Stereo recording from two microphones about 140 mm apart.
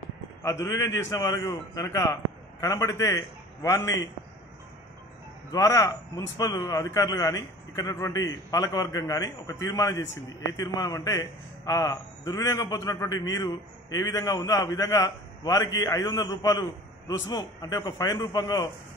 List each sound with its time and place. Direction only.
0.4 s a man's voice: 20° left (ahead or behind)
5.5 s a man's voice: 20° left (ahead or behind)